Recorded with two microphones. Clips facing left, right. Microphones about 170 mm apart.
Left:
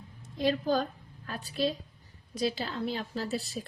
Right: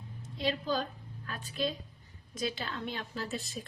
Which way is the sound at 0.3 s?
45° left (ahead or behind).